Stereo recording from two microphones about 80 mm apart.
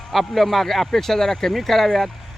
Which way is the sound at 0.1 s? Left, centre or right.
Centre.